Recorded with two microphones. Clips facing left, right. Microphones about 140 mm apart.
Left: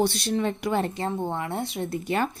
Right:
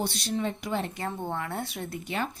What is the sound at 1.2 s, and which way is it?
Speech, 20° left (ahead or behind).